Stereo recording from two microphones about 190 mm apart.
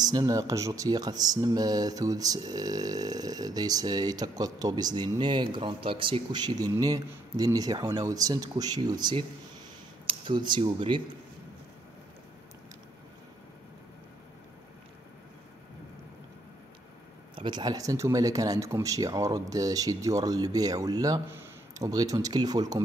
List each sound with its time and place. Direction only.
0.0 s speech: 20° right (ahead or behind)
17.4 s speech: 25° right (ahead or behind)